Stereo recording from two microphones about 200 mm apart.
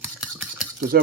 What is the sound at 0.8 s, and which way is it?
Stir, 45° right (ahead or behind).